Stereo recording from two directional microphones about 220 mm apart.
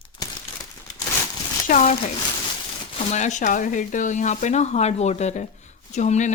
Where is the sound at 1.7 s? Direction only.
30° left (ahead or behind).